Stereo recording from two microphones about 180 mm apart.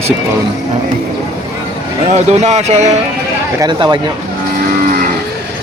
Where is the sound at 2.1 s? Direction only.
40° right (ahead or behind).